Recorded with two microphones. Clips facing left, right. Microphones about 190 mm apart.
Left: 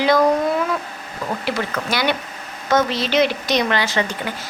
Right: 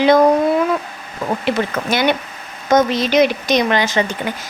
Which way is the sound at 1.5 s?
20° right (ahead or behind).